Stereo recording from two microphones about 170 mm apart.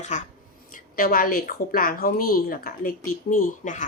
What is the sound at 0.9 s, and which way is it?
A woman's voice, 55° left (ahead or behind).